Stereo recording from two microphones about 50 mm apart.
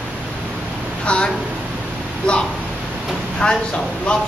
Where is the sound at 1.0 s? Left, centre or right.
Left.